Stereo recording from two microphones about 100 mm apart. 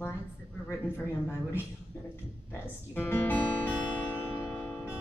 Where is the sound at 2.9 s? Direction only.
20° left (ahead or behind).